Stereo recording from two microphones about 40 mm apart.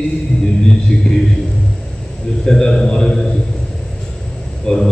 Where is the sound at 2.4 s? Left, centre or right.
Centre.